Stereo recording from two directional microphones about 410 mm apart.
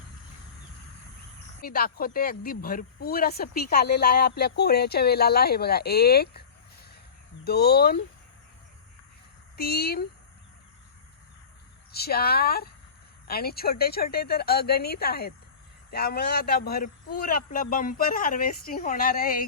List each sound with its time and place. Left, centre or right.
1.6 s speech: left
7.4 s speech: left
9.6 s speech: left
11.9 s speech: left